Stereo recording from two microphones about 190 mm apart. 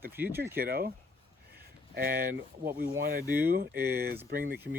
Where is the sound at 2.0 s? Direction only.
50° right (ahead or behind).